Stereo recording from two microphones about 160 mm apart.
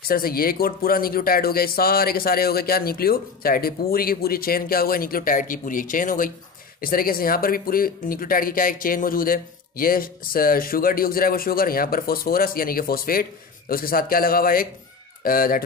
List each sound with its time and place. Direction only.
0.1 s speech: 65° left (ahead or behind)